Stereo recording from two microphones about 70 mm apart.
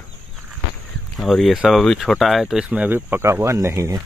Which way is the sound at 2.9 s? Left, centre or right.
Right.